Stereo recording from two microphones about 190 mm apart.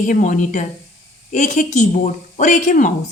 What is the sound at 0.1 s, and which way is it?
A woman's voice, 40° left (ahead or behind).